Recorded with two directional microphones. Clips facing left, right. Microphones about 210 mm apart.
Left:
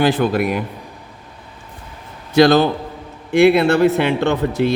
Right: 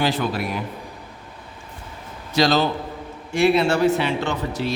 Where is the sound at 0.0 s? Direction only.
55° left (ahead or behind).